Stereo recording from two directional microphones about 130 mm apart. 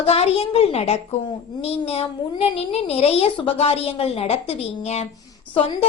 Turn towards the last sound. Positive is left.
turn(degrees=45)  # may be behind; listen again after turning